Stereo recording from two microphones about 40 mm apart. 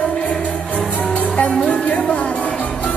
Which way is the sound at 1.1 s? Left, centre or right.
Left.